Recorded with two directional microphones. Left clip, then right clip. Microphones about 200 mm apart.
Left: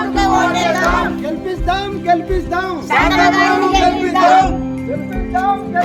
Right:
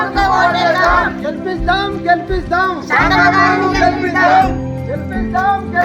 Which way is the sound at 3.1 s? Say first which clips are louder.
Right 3 dB; 50° left (ahead or behind).